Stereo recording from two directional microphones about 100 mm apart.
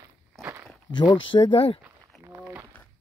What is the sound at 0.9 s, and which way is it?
Speech, 45° left (ahead or behind).